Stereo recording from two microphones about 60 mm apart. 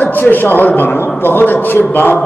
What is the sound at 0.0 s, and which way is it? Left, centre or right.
A man's voice, left.